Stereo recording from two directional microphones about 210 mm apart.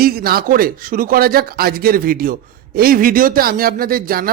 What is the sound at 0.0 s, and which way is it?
A man's voice, 45° right (ahead or behind).